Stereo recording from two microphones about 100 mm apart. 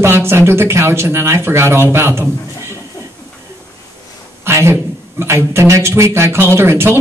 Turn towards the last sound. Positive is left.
turn(degrees=-25)  # may be behind; listen again after turning